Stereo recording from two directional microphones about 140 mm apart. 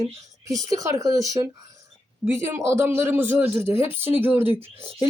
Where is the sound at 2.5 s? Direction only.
20° right (ahead or behind).